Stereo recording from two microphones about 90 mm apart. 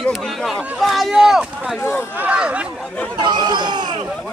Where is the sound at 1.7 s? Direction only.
25° left (ahead or behind).